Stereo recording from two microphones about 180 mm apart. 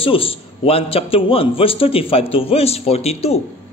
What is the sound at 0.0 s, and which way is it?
A man's voice, 30° left (ahead or behind).